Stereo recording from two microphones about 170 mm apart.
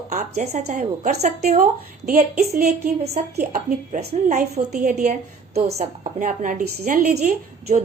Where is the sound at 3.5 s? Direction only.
50° right (ahead or behind).